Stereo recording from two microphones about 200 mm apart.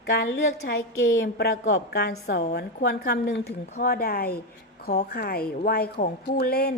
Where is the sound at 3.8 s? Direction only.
50° left (ahead or behind).